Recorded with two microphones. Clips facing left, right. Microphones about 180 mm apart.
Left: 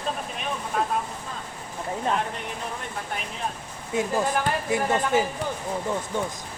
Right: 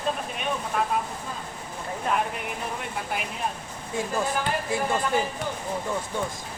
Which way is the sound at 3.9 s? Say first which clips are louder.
Left 3 dB; 20° left (ahead or behind).